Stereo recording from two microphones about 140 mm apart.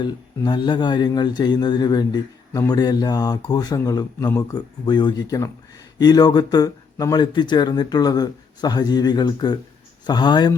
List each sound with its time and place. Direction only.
0.0 s speech: 35° left (ahead or behind)